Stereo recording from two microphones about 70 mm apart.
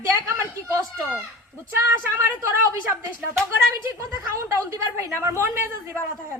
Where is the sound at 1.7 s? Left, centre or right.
Right.